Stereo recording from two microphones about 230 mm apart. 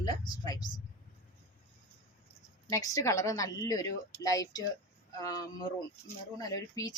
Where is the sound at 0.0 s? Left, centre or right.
Centre.